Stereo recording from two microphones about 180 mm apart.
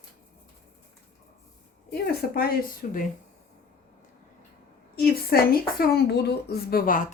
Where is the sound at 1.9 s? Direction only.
55° left (ahead or behind).